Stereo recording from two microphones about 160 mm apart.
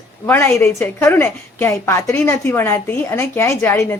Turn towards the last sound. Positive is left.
turn(degrees=15)  # may be behind; listen again after turning